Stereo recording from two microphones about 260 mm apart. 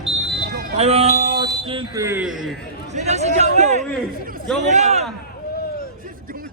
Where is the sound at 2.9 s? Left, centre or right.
Right.